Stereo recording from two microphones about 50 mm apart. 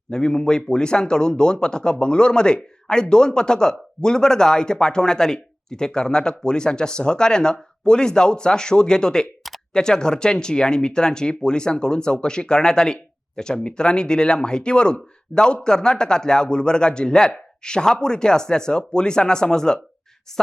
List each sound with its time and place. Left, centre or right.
0.1 s a man's voice: centre